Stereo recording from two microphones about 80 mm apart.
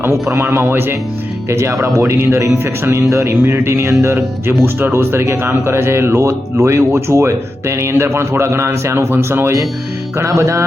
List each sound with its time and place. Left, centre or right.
0.0 s speech: right